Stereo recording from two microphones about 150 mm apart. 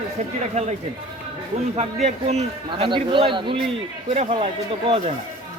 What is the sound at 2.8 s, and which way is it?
A man's voice, 35° right (ahead or behind).